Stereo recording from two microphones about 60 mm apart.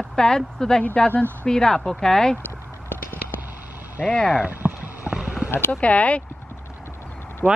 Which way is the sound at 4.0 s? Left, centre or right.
Left.